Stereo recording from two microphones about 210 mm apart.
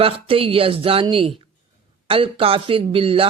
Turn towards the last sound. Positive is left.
turn(degrees=-25)  # may be behind; listen again after turning